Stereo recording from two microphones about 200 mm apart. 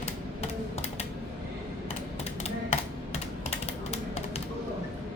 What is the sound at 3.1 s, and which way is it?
Typing, 30° left (ahead or behind).